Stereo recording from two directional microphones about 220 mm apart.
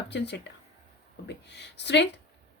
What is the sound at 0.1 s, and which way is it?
Speech, 50° left (ahead or behind).